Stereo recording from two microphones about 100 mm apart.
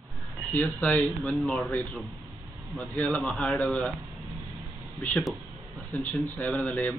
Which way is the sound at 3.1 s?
10° left (ahead or behind).